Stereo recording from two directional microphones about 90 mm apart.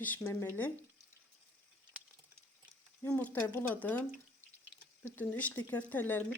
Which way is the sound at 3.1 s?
15° left (ahead or behind).